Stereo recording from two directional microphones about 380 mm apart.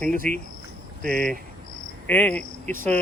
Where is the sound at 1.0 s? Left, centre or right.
Right.